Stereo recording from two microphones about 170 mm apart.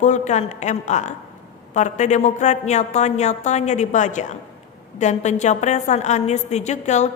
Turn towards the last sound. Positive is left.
turn(degrees=45)  # may be behind; listen again after turning